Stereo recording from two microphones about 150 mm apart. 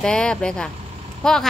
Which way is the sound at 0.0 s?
5° left (ahead or behind).